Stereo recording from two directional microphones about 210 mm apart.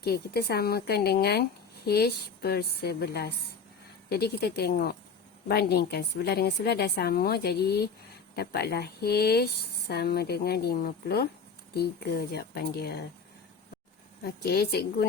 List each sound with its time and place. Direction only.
0.0 s speech: 50° left (ahead or behind)
14.3 s speech: 45° left (ahead or behind)